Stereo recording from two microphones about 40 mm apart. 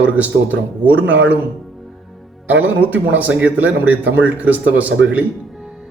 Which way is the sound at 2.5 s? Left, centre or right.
Right.